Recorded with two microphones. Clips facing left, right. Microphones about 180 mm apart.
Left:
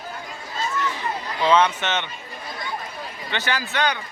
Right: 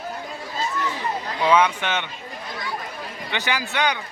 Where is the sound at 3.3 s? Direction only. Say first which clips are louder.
Even; 15° right (ahead or behind).